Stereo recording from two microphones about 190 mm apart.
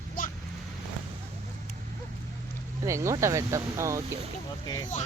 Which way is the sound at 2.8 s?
15° right (ahead or behind).